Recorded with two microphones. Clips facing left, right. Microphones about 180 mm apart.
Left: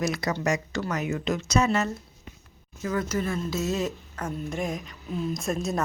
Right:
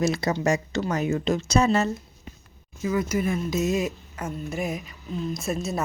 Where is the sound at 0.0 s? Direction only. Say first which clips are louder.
Right 3 dB; 25° right (ahead or behind).